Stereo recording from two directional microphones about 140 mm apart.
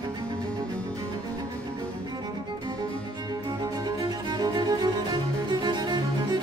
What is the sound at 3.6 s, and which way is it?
Music, 25° right (ahead or behind).